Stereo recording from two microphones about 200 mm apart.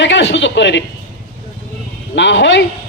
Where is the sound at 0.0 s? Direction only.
65° left (ahead or behind).